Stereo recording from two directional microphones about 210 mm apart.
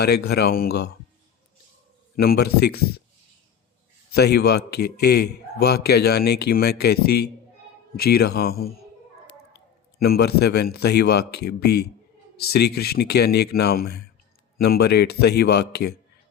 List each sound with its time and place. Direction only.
0.0 s a man's voice: 50° left (ahead or behind)
2.1 s a man's voice: 45° left (ahead or behind)
4.1 s a man's voice: 50° left (ahead or behind)
10.0 s a man's voice: 50° left (ahead or behind)